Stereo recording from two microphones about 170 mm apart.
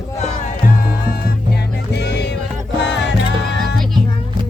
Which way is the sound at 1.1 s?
65° left (ahead or behind).